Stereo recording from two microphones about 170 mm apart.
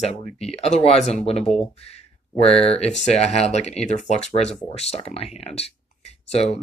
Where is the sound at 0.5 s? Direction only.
40° left (ahead or behind).